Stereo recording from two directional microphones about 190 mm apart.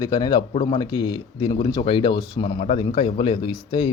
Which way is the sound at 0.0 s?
20° left (ahead or behind).